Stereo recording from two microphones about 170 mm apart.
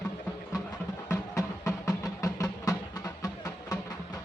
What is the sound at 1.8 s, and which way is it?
Music, 20° left (ahead or behind).